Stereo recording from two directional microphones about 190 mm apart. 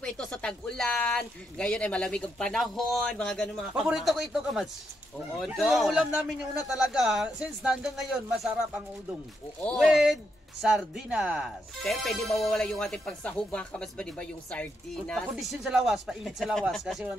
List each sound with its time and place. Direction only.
0.0 s speech: 5° left (ahead or behind)